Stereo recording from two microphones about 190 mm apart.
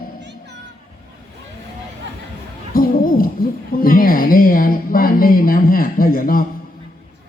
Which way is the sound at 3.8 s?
50° left (ahead or behind).